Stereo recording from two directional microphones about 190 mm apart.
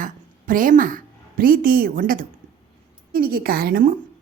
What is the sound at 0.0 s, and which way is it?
A woman's voice, 45° right (ahead or behind).